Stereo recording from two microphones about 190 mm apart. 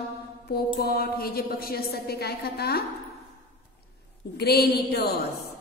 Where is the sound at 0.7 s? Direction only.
55° left (ahead or behind).